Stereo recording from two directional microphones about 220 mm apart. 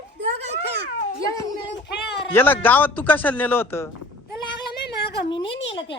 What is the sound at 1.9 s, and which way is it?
Speech, 50° left (ahead or behind).